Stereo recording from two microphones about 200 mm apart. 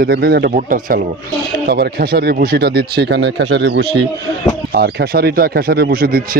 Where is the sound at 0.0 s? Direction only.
50° right (ahead or behind).